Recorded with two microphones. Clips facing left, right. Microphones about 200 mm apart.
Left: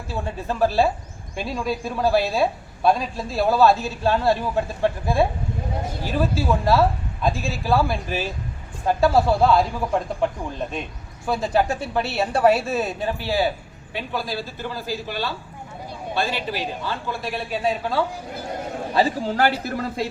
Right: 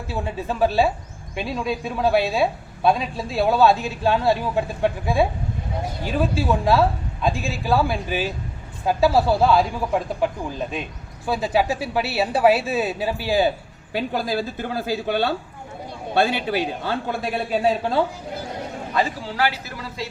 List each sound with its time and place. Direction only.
0.1 s speech: centre (ahead or behind)
11.3 s speech: 5° right (ahead or behind)
13.9 s speech: 45° right (ahead or behind)
18.9 s speech: 40° left (ahead or behind)